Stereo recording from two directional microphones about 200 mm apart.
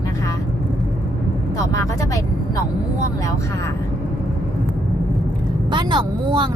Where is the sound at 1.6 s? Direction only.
15° left (ahead or behind).